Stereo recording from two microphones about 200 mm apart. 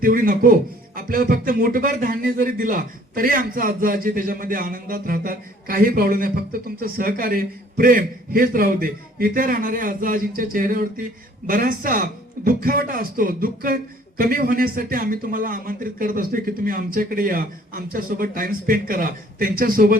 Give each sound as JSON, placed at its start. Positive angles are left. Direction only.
{"t": 0.0, "sound": "speech", "side_deg": -45}